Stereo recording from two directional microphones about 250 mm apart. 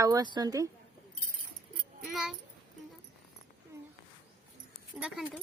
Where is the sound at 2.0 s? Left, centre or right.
Centre.